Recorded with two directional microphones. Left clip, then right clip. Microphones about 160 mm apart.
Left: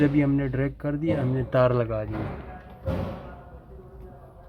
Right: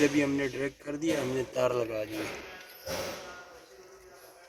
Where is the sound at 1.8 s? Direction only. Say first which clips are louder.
Left 4 dB; 25° right (ahead or behind).